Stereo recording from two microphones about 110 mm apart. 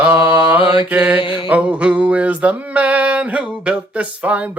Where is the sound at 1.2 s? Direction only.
50° left (ahead or behind).